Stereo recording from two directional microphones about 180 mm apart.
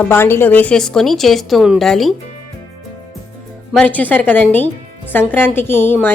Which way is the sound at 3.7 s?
10° left (ahead or behind).